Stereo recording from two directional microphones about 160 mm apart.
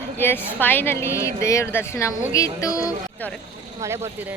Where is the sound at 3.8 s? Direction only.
15° right (ahead or behind).